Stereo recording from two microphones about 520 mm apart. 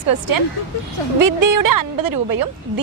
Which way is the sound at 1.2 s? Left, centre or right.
Right.